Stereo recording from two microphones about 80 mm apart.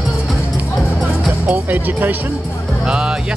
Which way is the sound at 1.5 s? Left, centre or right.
Right.